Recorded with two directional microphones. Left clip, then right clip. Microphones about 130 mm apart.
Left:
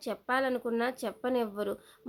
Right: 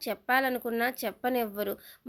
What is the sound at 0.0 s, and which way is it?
Speech, 10° right (ahead or behind).